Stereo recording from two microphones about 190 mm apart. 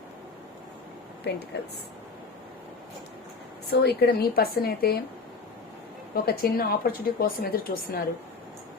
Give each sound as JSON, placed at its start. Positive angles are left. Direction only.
{"t": 3.7, "sound": "a woman's voice", "side_deg": 60}
{"t": 6.1, "sound": "a woman's voice", "side_deg": 55}